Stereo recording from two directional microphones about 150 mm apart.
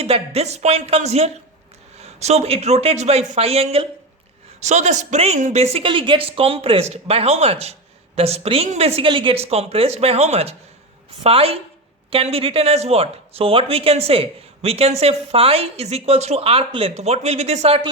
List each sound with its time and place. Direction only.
0.0 s a woman's voice: 45° right (ahead or behind)